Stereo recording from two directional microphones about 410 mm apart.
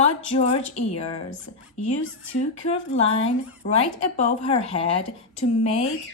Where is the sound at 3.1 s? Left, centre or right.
Centre.